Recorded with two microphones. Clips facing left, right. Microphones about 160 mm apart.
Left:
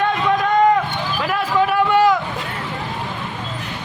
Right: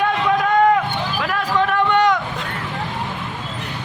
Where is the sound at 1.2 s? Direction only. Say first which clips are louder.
Left 2 dB; 5° left (ahead or behind).